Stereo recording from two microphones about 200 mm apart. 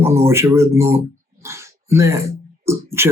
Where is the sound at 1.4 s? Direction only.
15° right (ahead or behind).